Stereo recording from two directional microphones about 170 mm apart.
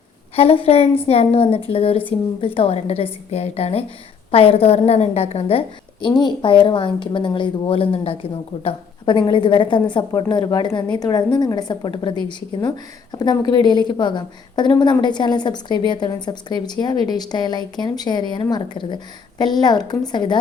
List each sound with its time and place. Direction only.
0.3 s a woman's voice: 35° left (ahead or behind)